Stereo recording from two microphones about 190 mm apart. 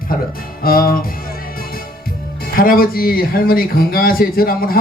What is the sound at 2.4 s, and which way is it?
Speech, 50° left (ahead or behind).